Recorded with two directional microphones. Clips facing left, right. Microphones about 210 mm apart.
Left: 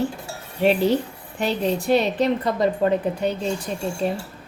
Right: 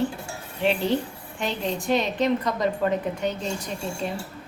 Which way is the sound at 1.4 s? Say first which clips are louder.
Left 5 dB; 35° left (ahead or behind).